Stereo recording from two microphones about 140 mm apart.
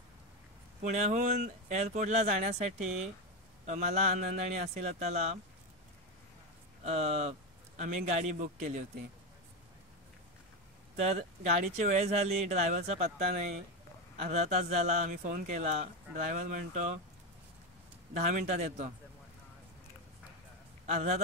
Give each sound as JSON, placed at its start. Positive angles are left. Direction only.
{"t": 0.8, "sound": "a man's voice", "side_deg": -60}
{"t": 6.8, "sound": "a man's voice", "side_deg": -50}
{"t": 11.1, "sound": "a man's voice", "side_deg": -55}
{"t": 18.1, "sound": "a man's voice", "side_deg": -55}
{"t": 20.8, "sound": "a man's voice", "side_deg": -50}